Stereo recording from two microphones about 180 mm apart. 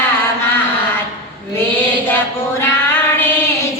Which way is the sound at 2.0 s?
10° left (ahead or behind).